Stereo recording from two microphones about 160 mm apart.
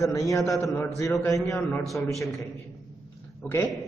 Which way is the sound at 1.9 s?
Centre (ahead or behind).